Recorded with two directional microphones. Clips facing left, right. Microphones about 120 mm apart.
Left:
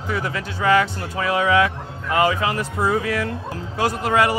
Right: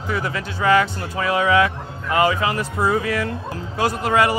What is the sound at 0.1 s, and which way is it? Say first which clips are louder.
Speech: right 1 dB; 20° right (ahead or behind).